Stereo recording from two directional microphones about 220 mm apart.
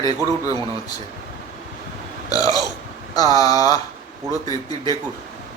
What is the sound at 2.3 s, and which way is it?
Burping, 15° left (ahead or behind).